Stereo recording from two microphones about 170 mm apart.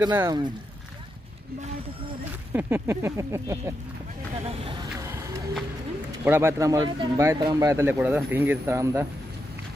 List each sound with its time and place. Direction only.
0.0 s speech: 20° right (ahead or behind)
2.5 s speech: 15° right (ahead or behind)
6.2 s speech: 15° right (ahead or behind)